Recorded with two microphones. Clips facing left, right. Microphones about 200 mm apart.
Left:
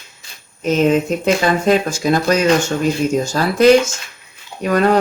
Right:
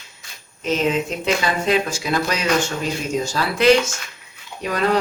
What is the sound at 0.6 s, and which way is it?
Speech, 45° left (ahead or behind).